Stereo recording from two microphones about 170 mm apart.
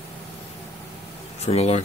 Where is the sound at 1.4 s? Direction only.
40° left (ahead or behind).